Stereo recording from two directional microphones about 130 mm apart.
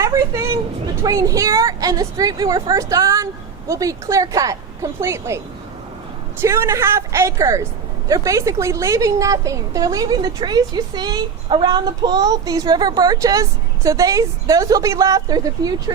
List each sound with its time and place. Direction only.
0.0 s speech: 25° right (ahead or behind)
6.4 s speech: 20° right (ahead or behind)